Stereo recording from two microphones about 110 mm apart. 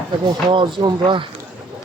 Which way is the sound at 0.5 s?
45° right (ahead or behind).